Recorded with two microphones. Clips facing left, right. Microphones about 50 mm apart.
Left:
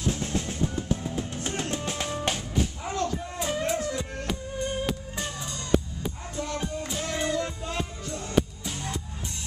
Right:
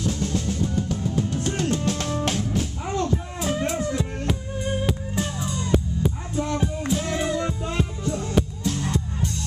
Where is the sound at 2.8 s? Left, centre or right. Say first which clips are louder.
Right 4 dB; centre.